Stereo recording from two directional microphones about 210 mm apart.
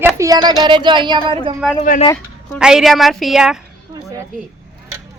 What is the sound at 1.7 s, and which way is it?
Speech, 40° left (ahead or behind).